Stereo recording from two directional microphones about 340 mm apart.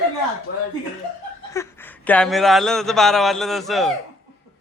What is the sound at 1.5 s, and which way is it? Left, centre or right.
A man's voice, centre.